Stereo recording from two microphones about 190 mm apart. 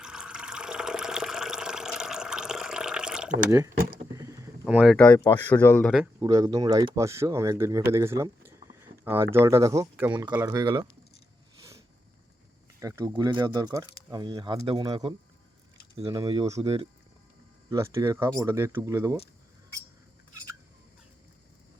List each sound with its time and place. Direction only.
0.0 s water: 5° right (ahead or behind)
3.9 s rowboat: 15° right (ahead or behind)
4.8 s speech: 5° left (ahead or behind)
6.1 s speech: 20° right (ahead or behind)
12.8 s speech: 20° right (ahead or behind)
17.7 s speech: 15° right (ahead or behind)